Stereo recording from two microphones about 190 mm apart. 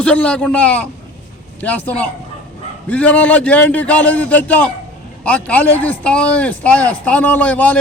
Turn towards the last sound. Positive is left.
turn(degrees=10)  # may be behind; listen again after turning